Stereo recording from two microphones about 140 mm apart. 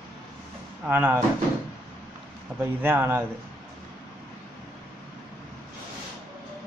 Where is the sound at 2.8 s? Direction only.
15° right (ahead or behind).